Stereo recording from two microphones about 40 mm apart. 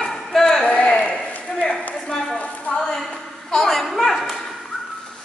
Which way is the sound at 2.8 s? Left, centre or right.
Centre.